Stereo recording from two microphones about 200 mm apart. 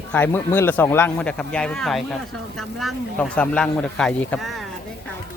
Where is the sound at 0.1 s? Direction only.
10° left (ahead or behind).